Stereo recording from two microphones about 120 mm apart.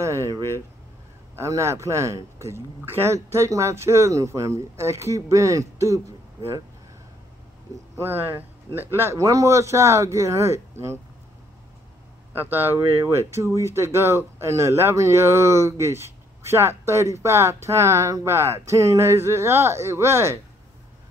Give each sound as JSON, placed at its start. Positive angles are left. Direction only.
{"t": 0.0, "sound": "a sound", "side_deg": -25}
{"t": 1.3, "sound": "speech", "side_deg": -25}
{"t": 8.0, "sound": "speech", "side_deg": -15}
{"t": 12.3, "sound": "speech", "side_deg": -15}